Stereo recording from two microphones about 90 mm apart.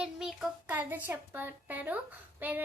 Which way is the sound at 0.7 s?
20° right (ahead or behind).